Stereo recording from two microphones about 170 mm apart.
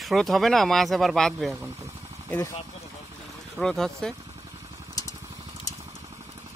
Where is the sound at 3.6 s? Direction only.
Centre (ahead or behind).